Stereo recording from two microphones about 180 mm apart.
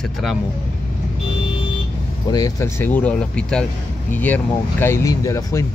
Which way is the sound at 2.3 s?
20° left (ahead or behind).